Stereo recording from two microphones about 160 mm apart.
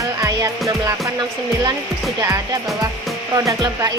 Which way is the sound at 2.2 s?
20° right (ahead or behind).